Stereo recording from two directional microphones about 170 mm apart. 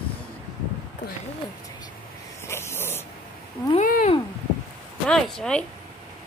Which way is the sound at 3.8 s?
50° left (ahead or behind).